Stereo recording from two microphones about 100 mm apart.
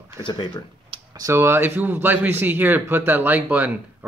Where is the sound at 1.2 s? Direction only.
25° right (ahead or behind).